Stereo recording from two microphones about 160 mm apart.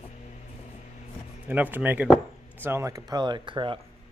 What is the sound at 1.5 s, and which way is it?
Speech, 10° right (ahead or behind).